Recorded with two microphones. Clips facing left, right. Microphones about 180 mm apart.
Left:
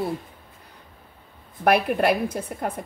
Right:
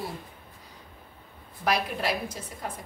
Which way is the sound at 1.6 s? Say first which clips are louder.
Left 8 dB; 60° left (ahead or behind).